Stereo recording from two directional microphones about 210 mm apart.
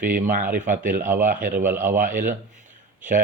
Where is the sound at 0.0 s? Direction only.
40° right (ahead or behind).